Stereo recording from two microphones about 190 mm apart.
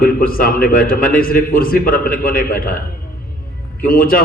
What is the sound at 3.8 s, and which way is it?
Speech, 50° left (ahead or behind).